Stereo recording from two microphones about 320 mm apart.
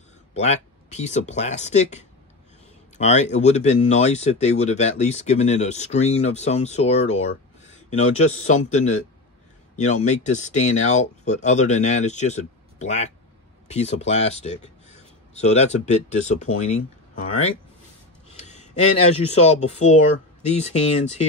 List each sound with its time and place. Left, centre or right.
0.3 s speech: left
18.3 s a sound: left
20.4 s speech: centre